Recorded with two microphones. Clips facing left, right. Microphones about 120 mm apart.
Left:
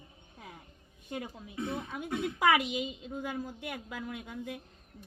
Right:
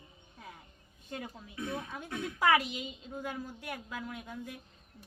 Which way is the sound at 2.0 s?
15° left (ahead or behind).